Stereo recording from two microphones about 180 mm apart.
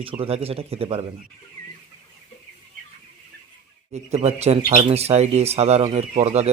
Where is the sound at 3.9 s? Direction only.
40° right (ahead or behind).